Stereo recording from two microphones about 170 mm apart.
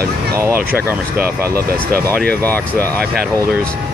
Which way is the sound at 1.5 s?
60° right (ahead or behind).